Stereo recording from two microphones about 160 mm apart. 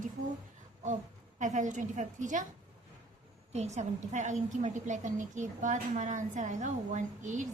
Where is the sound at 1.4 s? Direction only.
50° right (ahead or behind).